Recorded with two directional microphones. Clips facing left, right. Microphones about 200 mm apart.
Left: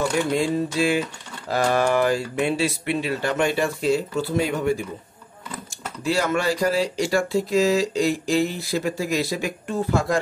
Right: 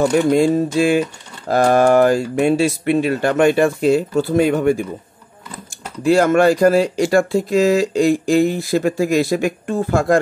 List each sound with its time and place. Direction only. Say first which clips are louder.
0.1 s speech: right 8 dB; 50° right (ahead or behind)
6.0 s speech: right 10 dB; 50° right (ahead or behind)